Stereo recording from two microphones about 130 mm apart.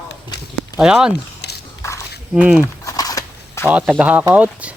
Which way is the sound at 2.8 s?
30° left (ahead or behind).